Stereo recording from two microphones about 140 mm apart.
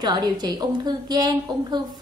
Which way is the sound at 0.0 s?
30° right (ahead or behind).